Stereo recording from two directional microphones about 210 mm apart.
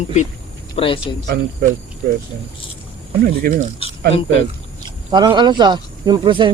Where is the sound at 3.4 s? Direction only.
45° right (ahead or behind).